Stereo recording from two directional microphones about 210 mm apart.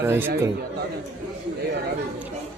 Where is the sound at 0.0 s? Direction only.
10° right (ahead or behind).